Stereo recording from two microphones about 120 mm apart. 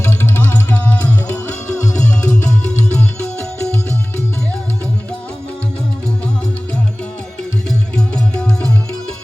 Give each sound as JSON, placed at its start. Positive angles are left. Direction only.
{"t": 0.0, "sound": "music", "side_deg": 15}
{"t": 1.8, "sound": "music", "side_deg": 25}
{"t": 7.7, "sound": "music", "side_deg": 5}